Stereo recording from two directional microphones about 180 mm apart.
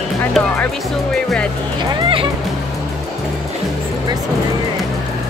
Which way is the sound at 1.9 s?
30° right (ahead or behind).